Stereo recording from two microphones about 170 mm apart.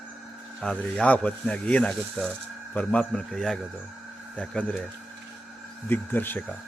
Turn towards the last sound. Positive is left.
turn(degrees=10)  # may be behind; listen again after turning